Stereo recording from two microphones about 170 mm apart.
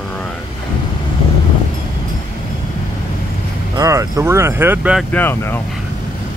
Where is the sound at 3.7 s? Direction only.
20° right (ahead or behind).